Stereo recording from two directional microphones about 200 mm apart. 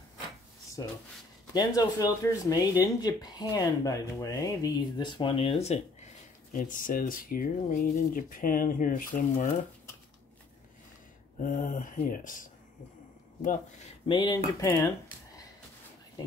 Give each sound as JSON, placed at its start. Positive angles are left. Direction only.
{"t": 1.5, "sound": "speech", "side_deg": 20}
{"t": 11.4, "sound": "speech", "side_deg": 40}
{"t": 14.0, "sound": "speech", "side_deg": 25}